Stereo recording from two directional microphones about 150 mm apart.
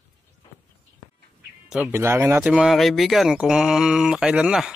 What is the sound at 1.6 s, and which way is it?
Speech, 5° right (ahead or behind).